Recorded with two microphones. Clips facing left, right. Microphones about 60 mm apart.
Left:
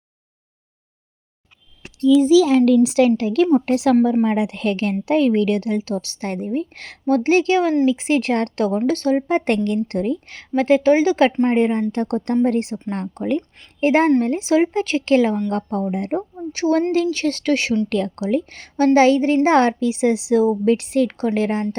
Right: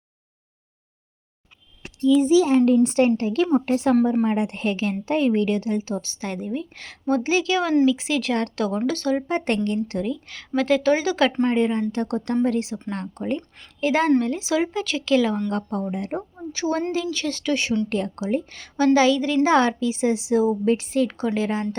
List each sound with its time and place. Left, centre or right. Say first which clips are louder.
2.1 s a child's voice: left 4 dB; left
3.2 s a woman's voice: left 4 dB; left
5.0 s a woman's voice: left 4 dB; left
8.9 s speech: left 5 dB; left
9.3 s a woman's voice: left 4 dB; left
10.3 s a woman's voice: left 4 dB; left
11.5 s a woman's voice: left 3 dB; left
13.1 s a woman's voice: left 5 dB; left
13.7 s a woman's voice: left 4 dB; left
17.8 s a woman's voice: left 4 dB; left
18.5 s a woman's voice: left 3 dB; left